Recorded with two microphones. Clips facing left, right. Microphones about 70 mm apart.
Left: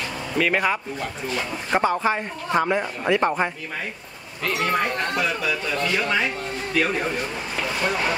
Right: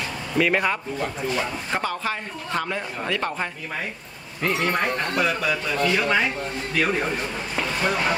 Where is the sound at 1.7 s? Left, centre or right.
Left.